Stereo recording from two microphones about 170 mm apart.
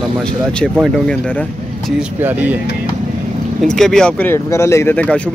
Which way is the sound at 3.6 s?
Centre (ahead or behind).